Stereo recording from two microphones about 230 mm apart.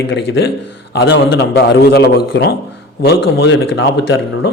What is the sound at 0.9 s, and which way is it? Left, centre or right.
A man's voice, left.